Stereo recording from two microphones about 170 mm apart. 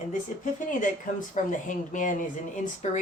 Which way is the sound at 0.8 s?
50° left (ahead or behind).